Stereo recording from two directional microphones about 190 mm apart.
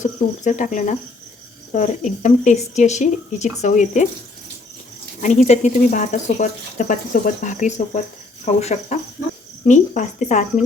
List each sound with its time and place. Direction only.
0.0 s cricket: 40° left (ahead or behind)
1.7 s speech: 40° left (ahead or behind)
5.2 s speech: 35° left (ahead or behind)